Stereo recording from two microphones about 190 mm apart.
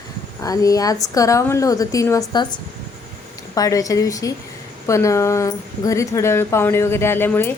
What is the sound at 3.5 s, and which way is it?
Speech, 20° left (ahead or behind).